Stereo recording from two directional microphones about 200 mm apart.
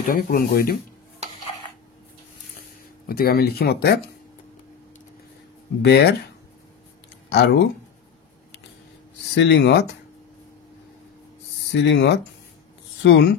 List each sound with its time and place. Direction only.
0.0 s speech: 45° left (ahead or behind)
3.1 s speech: 50° left (ahead or behind)
5.9 s speech: 55° left (ahead or behind)
7.2 s speech: 55° left (ahead or behind)
9.3 s speech: 60° left (ahead or behind)
11.7 s speech: 60° left (ahead or behind)